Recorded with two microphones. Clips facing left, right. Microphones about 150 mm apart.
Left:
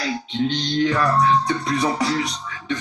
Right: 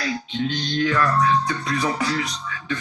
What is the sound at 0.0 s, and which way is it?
Speech, 25° left (ahead or behind).